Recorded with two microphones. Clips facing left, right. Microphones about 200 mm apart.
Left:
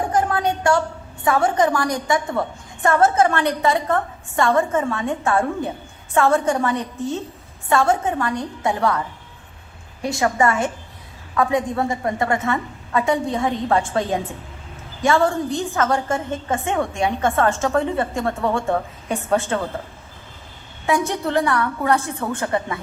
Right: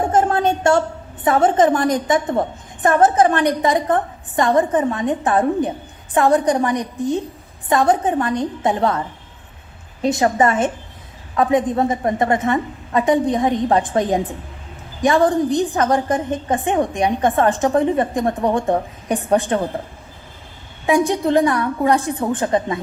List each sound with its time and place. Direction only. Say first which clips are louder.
0.0 s a woman's voice: right 4 dB; 25° right (ahead or behind)
20.8 s a woman's voice: right 5 dB; 15° right (ahead or behind)